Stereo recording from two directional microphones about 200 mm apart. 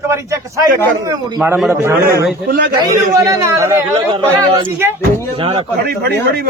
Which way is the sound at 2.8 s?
15° right (ahead or behind).